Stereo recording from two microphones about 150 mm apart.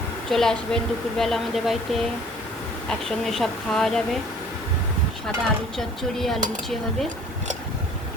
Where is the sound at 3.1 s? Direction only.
Centre (ahead or behind).